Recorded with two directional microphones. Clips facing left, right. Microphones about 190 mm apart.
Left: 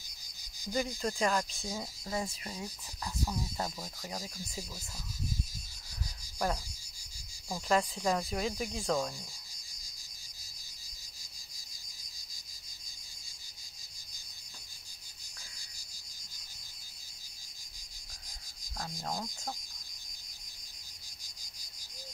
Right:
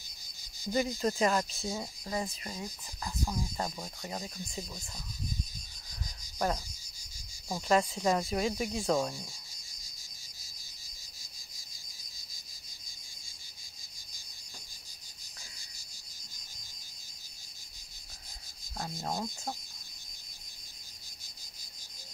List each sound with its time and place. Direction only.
0.7 s speech: 5° right (ahead or behind)
6.3 s speech: 5° right (ahead or behind)
7.6 s speech: 5° right (ahead or behind)
8.9 s cricket: 15° right (ahead or behind)
18.9 s speech: 20° right (ahead or behind)